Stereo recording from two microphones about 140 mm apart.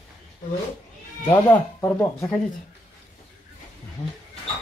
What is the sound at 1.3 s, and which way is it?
Speech, 15° left (ahead or behind).